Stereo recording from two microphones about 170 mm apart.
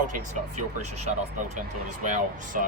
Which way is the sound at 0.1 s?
45° right (ahead or behind).